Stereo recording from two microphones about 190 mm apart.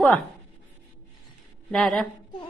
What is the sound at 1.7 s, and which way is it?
Speech, centre (ahead or behind).